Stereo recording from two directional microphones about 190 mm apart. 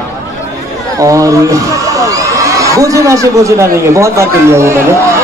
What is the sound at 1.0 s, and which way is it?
A man's voice, 15° right (ahead or behind).